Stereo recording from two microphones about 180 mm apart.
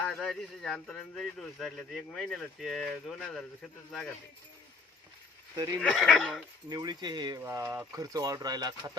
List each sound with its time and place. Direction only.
0.0 s speech: 5° left (ahead or behind)
5.5 s speech: 20° right (ahead or behind)
5.8 s speech: 5° left (ahead or behind)
6.7 s speech: 20° right (ahead or behind)